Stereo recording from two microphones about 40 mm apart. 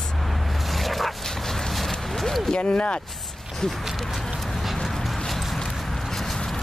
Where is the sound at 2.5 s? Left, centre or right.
Left.